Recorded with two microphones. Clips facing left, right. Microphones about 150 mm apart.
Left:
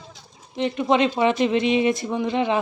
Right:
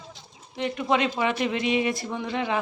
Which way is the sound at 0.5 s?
25° left (ahead or behind).